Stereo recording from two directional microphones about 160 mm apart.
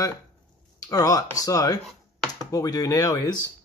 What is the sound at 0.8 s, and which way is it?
Speech, 20° left (ahead or behind).